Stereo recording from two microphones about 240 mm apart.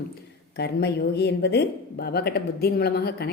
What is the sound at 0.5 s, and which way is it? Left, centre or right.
Speech, left.